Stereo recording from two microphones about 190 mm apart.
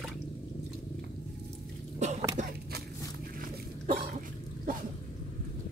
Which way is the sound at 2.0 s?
35° right (ahead or behind).